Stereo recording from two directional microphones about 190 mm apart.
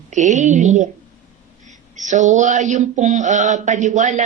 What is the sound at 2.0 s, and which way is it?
Mantra, 40° right (ahead or behind).